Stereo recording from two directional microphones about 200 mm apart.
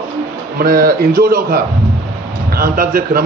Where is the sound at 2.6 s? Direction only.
45° right (ahead or behind).